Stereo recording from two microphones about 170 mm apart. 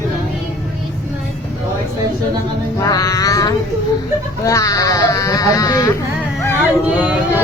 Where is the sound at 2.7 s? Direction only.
20° left (ahead or behind).